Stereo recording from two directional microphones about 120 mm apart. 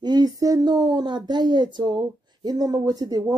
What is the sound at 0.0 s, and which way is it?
Speech, 35° right (ahead or behind).